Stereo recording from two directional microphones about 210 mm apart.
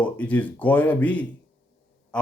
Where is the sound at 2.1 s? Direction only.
5° left (ahead or behind).